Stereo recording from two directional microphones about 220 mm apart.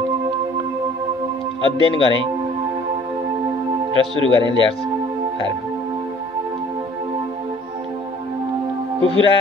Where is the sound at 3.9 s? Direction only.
25° right (ahead or behind).